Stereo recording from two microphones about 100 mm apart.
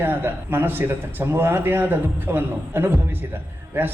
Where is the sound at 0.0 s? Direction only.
20° right (ahead or behind).